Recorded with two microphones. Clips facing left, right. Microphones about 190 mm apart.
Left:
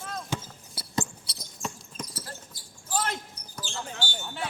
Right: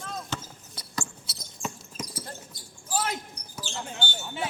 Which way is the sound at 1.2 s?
5° right (ahead or behind).